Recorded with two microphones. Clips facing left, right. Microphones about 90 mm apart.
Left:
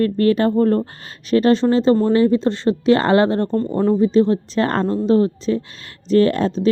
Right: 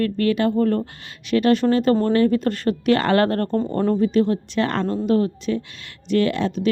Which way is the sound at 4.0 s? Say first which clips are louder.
Left 4 dB; 30° left (ahead or behind).